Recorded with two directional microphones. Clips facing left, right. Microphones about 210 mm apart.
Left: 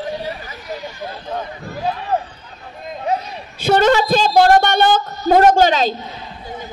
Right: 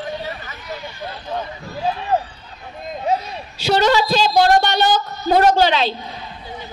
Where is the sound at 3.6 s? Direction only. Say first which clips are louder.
Left 3 dB; 55° left (ahead or behind).